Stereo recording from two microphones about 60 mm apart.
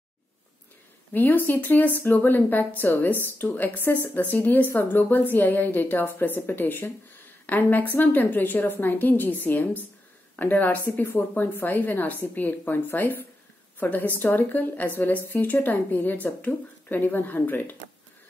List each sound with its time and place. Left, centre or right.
1.1 s a woman's voice: left